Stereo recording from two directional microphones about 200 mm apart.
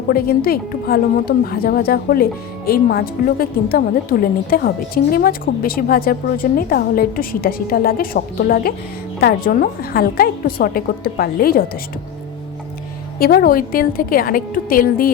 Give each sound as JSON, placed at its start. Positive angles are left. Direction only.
{"t": 0.1, "sound": "a woman's voice", "side_deg": 50}
{"t": 13.1, "sound": "a woman's voice", "side_deg": 45}